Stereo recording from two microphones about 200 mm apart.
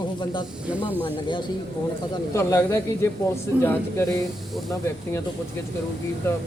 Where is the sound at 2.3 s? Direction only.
15° left (ahead or behind).